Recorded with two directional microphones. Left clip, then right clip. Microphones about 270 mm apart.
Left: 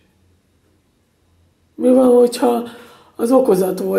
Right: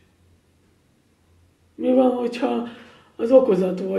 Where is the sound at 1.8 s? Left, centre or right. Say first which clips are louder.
Left 8 dB; left.